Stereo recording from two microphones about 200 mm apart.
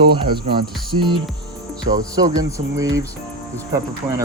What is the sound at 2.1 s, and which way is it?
Speech, 20° right (ahead or behind).